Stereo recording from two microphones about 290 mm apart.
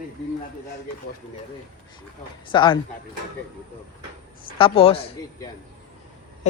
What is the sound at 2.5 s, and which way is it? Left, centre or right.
Speech, centre.